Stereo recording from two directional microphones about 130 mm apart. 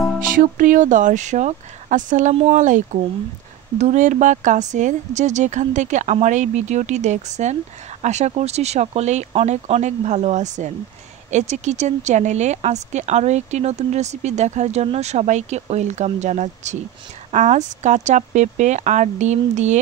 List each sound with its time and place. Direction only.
0.4 s speech: 90° right
2.3 s speech: 65° right (ahead or behind)
9.3 s speech: 50° right (ahead or behind)